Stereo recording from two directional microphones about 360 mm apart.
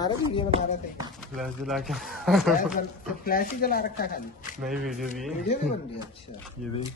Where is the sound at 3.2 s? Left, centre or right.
Left.